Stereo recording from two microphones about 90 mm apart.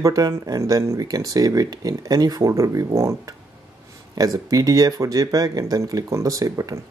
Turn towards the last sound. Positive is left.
turn(degrees=-40)  # may be behind; listen again after turning